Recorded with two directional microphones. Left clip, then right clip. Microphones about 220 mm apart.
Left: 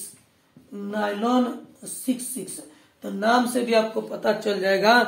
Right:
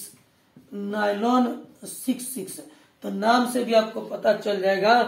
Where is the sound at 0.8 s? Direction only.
10° left (ahead or behind).